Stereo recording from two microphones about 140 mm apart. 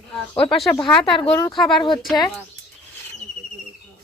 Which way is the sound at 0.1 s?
5° left (ahead or behind).